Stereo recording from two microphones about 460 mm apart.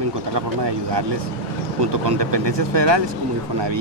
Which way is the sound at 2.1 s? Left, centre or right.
Right.